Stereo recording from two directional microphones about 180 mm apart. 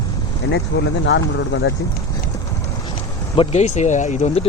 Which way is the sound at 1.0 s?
90° left.